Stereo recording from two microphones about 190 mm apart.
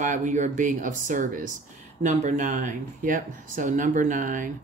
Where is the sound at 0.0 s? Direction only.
40° right (ahead or behind).